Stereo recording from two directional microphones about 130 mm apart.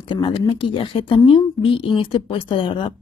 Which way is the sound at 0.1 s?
35° left (ahead or behind).